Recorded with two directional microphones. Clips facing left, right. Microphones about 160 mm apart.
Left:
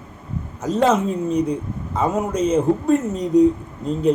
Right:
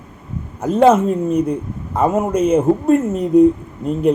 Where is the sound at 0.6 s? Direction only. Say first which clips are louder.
Right 6 dB; 55° right (ahead or behind).